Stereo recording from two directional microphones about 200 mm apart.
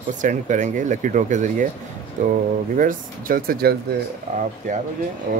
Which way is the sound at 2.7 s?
45° right (ahead or behind).